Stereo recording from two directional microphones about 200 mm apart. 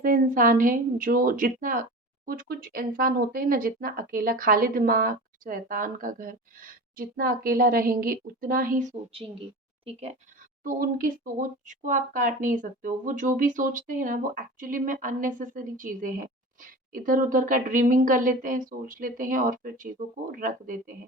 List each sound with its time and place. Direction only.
0.0 s a woman's voice: 45° right (ahead or behind)
10.6 s a woman's voice: 45° right (ahead or behind)